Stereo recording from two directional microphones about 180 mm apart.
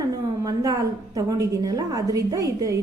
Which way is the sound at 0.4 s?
20° right (ahead or behind).